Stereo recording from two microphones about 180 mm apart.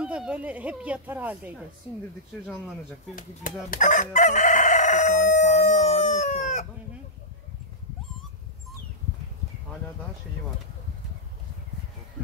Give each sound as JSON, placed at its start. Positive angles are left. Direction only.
{"t": 0.0, "sound": "speech", "side_deg": -5}
{"t": 3.2, "sound": "chicken", "side_deg": 50}